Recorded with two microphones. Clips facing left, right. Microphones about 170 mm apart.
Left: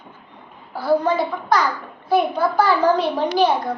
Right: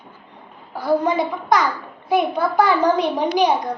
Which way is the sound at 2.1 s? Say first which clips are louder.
Left 1 dB; 20° right (ahead or behind).